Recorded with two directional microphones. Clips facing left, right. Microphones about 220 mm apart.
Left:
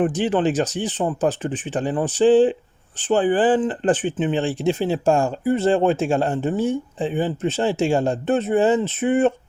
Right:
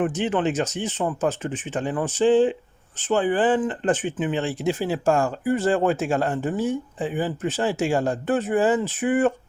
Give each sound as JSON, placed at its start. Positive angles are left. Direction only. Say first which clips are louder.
{"t": 0.0, "sound": "speech", "louder": "left 3 dB", "side_deg": 35}